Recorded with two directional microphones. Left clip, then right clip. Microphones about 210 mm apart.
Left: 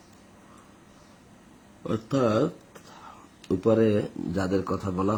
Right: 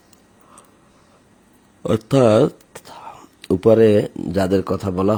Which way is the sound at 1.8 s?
50° right (ahead or behind).